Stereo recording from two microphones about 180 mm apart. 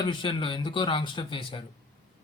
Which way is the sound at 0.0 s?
25° left (ahead or behind).